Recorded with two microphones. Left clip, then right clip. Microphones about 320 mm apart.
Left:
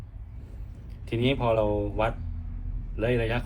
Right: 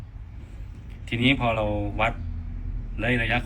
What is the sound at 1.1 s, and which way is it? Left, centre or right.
Speech, centre.